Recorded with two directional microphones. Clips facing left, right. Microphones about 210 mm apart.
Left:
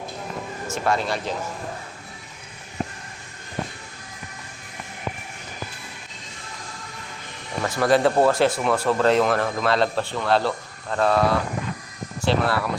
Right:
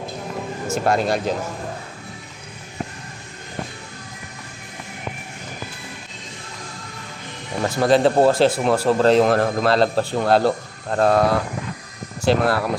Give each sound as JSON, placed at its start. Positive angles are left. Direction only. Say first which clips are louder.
{"t": 0.7, "sound": "speech", "louder": "right 4 dB", "side_deg": -40}
{"t": 7.6, "sound": "speech", "louder": "right 3 dB", "side_deg": -25}
{"t": 12.2, "sound": "speech", "louder": "right 4 dB", "side_deg": -40}